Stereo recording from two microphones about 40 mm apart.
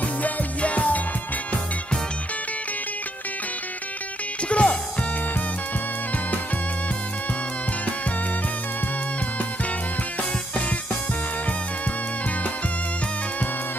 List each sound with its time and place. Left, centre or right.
0.0 s music: left
4.5 s music: left